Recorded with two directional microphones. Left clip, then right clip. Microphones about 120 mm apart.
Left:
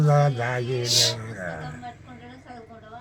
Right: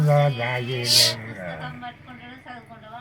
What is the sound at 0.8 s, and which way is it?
Speech, 40° right (ahead or behind).